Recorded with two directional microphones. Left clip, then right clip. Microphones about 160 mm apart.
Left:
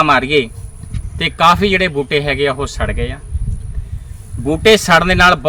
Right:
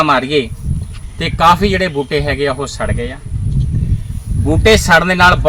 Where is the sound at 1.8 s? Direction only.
10° left (ahead or behind).